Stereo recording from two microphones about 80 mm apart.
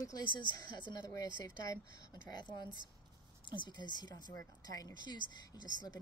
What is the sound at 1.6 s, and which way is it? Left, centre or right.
A woman's voice, left.